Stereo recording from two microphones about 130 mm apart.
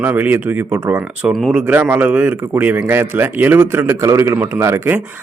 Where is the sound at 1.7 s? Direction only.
15° right (ahead or behind).